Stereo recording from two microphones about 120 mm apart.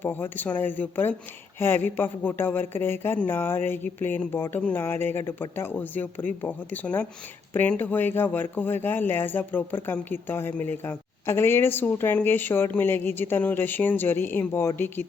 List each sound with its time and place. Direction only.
0.0 s speech: 15° left (ahead or behind)